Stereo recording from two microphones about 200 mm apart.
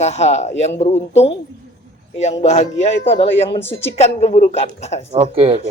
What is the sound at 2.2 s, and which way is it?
Speech, 35° left (ahead or behind).